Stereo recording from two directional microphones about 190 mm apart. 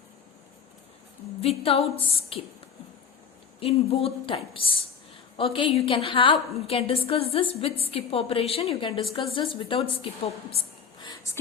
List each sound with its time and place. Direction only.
1.4 s a woman's voice: 30° left (ahead or behind)
3.6 s a woman's voice: 30° left (ahead or behind)
11.0 s a sound: 20° left (ahead or behind)